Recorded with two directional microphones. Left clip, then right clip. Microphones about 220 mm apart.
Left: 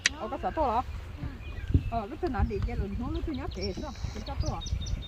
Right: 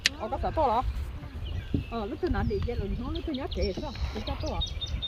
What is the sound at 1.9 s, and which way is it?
Speech, 30° left (ahead or behind).